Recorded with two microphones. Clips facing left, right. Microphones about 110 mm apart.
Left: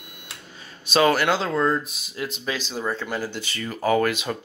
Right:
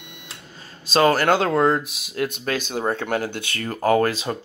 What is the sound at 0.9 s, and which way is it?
Speech, 40° right (ahead or behind).